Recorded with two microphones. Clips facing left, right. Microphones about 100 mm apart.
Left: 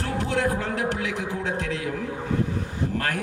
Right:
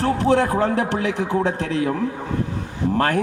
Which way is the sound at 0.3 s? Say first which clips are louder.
Right 6 dB; 60° right (ahead or behind).